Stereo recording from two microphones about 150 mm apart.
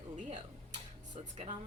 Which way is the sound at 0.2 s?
55° right (ahead or behind).